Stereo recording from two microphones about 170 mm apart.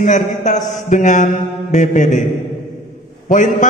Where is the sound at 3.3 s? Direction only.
45° left (ahead or behind).